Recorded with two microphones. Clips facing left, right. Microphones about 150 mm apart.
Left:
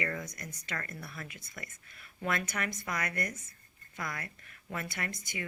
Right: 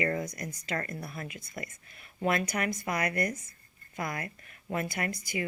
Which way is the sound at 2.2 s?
25° right (ahead or behind).